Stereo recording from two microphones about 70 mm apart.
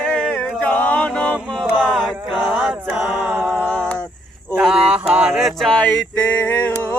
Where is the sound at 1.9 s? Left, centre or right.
Centre.